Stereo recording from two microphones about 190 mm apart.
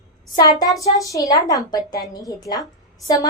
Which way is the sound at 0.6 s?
20° left (ahead or behind).